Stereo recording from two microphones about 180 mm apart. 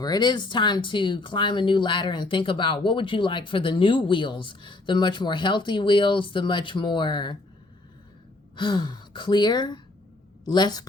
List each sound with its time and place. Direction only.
0.0 s speech: 20° left (ahead or behind)
8.5 s speech: 25° left (ahead or behind)